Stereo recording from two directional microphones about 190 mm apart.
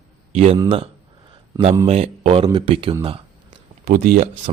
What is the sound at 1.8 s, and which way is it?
Speech, 30° right (ahead or behind).